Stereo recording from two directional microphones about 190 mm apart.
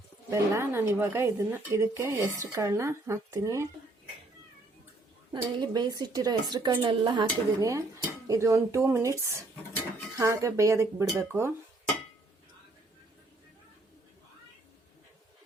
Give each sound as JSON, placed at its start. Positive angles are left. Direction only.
{"t": 0.3, "sound": "speech", "side_deg": -15}
{"t": 5.3, "sound": "a woman's voice", "side_deg": -25}